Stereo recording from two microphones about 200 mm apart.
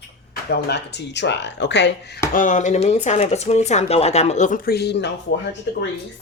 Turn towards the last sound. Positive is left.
turn(degrees=60)  # may be behind; listen again after turning